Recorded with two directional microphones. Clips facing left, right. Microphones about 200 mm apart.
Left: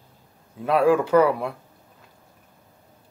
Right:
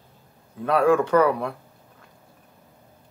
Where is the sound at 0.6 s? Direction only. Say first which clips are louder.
Even; 10° left (ahead or behind).